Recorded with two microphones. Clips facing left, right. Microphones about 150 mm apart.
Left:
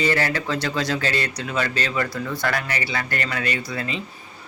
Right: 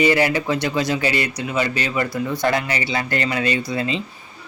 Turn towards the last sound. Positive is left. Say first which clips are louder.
# right 5 dB
turn(degrees=-20)  # may be behind; listen again after turning